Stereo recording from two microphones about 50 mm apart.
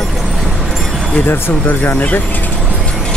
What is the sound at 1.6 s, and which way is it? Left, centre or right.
Speech, left.